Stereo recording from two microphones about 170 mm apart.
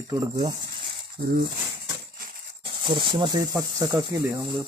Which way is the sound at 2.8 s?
30° right (ahead or behind).